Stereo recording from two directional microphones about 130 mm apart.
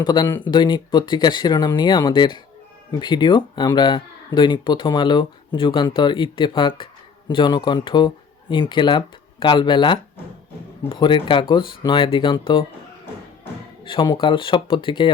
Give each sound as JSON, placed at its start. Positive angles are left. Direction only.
{"t": 0.0, "sound": "speech", "side_deg": 35}
{"t": 13.8, "sound": "speech", "side_deg": 40}